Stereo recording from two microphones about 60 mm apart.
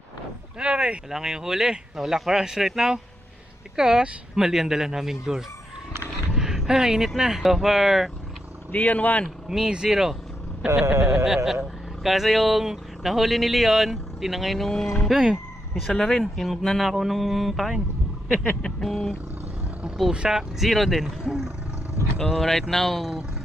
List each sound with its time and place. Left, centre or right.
0.6 s speech: centre
8.7 s speech: left
9.5 s speech: centre
10.9 s a sound: right
11.2 s speech: centre
20.1 s speech: centre
22.2 s speech: centre